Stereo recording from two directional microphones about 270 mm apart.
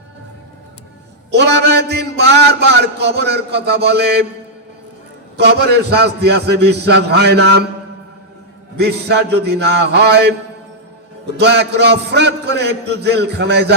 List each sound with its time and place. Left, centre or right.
1.3 s a man's voice: right
5.4 s a man's voice: right
8.7 s a man's voice: right
11.3 s a man's voice: right